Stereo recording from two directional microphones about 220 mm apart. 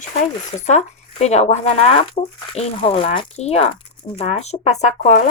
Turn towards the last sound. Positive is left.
turn(degrees=30)  # may be behind; listen again after turning